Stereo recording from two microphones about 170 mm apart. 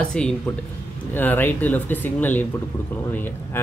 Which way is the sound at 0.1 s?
5° left (ahead or behind).